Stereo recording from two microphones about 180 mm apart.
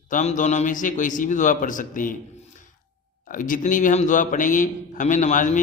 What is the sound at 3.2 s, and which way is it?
A man's voice, 50° left (ahead or behind).